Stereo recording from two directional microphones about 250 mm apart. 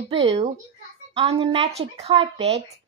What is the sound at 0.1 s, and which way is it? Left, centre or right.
Speech, right.